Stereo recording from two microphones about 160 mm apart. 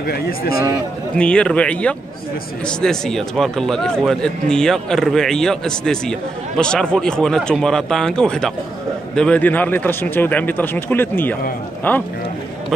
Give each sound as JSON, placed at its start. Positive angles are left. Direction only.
{"t": 0.0, "sound": "speech", "side_deg": 70}
{"t": 1.1, "sound": "speech", "side_deg": 5}